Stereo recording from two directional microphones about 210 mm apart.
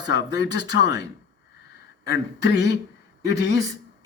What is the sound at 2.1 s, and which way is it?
Speech, 55° left (ahead or behind).